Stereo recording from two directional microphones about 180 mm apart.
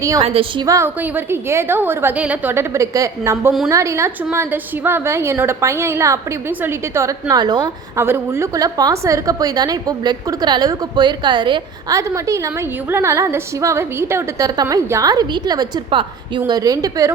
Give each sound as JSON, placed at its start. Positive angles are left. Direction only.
{"t": 0.2, "sound": "a woman's voice", "side_deg": -30}